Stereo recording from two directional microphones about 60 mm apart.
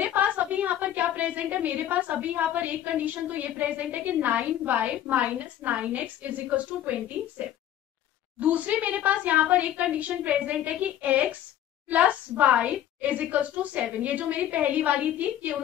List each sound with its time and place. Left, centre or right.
0.0 s a woman's voice: right
8.4 s a woman's voice: right